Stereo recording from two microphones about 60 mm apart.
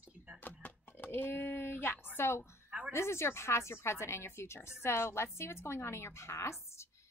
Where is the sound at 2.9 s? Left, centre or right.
Left.